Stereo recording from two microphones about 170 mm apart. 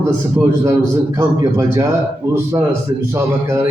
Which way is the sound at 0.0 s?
15° right (ahead or behind).